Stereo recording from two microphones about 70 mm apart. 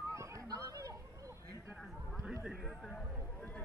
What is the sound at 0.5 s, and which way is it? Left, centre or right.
Chatter, right.